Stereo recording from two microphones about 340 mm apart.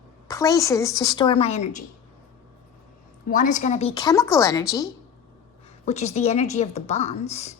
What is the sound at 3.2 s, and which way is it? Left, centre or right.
A woman's voice, left.